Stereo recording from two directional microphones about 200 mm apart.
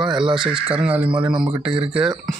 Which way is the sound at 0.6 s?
5° right (ahead or behind).